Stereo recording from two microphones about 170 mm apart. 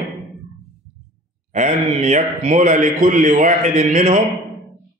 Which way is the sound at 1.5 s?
45° right (ahead or behind).